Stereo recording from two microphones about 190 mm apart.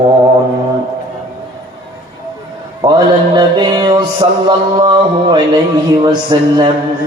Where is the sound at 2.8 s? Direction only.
25° right (ahead or behind).